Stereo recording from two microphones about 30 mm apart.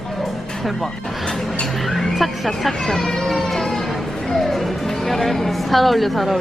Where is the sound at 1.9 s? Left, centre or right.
Centre.